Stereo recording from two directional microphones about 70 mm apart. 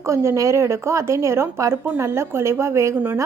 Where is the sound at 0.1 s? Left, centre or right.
Right.